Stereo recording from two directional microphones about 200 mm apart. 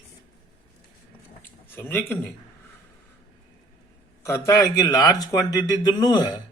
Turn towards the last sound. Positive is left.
turn(degrees=20)  # may be behind; listen again after turning